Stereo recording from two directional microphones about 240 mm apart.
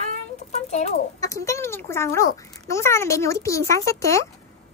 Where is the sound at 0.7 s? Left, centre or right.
Left.